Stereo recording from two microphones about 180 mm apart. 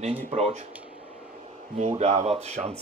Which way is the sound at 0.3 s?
35° right (ahead or behind).